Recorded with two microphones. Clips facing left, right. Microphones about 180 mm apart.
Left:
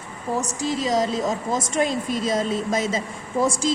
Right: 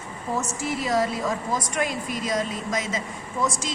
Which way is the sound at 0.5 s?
20° left (ahead or behind).